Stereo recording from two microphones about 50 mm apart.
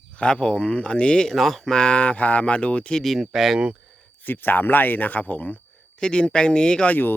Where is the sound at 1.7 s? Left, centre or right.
Left.